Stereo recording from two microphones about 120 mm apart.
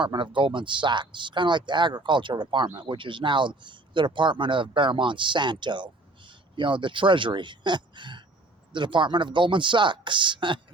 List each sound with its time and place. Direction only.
0.0 s speech: 40° right (ahead or behind)